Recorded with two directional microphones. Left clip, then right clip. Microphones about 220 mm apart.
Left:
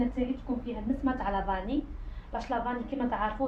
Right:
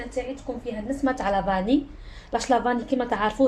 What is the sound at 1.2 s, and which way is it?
A woman's voice, 45° right (ahead or behind).